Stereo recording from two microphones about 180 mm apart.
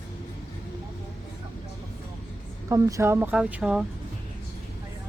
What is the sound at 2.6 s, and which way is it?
Speech, 15° right (ahead or behind).